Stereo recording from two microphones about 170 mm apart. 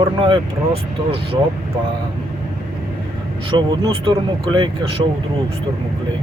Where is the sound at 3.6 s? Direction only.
25° right (ahead or behind).